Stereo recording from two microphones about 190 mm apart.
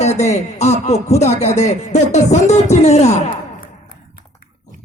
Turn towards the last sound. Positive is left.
turn(degrees=50)  # may be behind; listen again after turning